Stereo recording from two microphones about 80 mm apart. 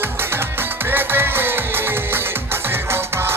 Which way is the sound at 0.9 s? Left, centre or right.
Right.